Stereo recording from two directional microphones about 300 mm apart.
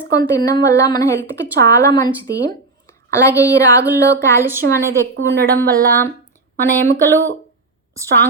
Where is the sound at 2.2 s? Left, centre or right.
Centre.